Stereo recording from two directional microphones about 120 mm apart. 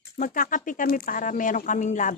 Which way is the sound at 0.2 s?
90° left.